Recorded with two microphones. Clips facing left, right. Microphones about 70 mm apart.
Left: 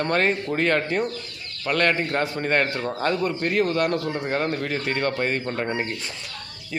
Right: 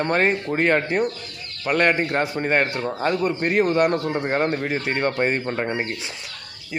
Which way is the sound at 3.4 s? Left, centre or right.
Right.